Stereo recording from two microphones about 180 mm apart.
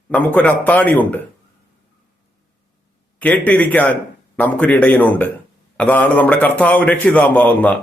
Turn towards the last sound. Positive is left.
turn(degrees=10)  # may be behind; listen again after turning